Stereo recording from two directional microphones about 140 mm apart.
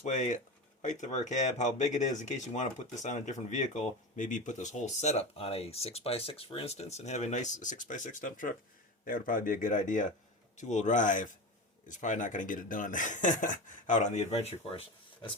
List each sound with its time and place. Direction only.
0.0 s speech: 60° left (ahead or behind)